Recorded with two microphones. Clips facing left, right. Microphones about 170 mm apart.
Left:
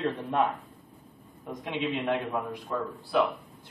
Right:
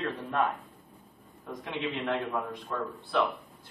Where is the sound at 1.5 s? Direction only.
15° left (ahead or behind).